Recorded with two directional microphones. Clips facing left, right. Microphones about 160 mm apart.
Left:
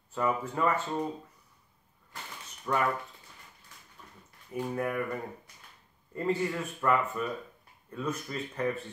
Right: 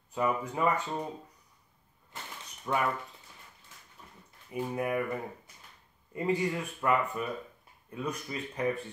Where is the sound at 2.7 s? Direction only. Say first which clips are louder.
Left 1 dB; 15° right (ahead or behind).